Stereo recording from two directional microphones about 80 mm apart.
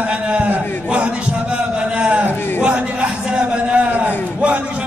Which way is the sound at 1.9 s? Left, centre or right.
Centre.